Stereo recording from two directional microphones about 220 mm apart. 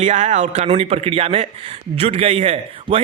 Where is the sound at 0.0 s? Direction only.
30° right (ahead or behind).